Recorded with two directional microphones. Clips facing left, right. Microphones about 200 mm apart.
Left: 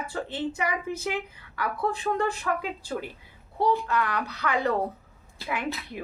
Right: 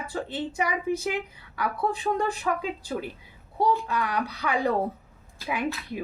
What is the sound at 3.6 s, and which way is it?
Speech, 15° right (ahead or behind).